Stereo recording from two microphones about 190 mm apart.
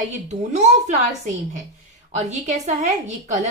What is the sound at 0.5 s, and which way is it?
A woman's voice, 35° right (ahead or behind).